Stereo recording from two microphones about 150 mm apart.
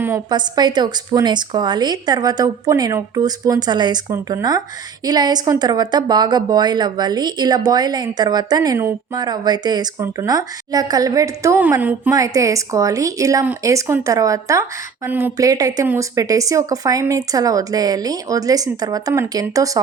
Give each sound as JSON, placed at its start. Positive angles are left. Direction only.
{"t": 0.3, "sound": "a woman's voice", "side_deg": -30}
{"t": 12.1, "sound": "a woman's voice", "side_deg": -25}